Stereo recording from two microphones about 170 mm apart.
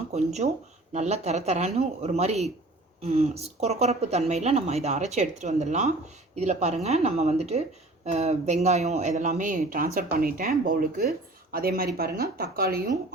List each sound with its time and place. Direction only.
0.1 s speech: 40° right (ahead or behind); by 12.8 s 65° right (ahead or behind)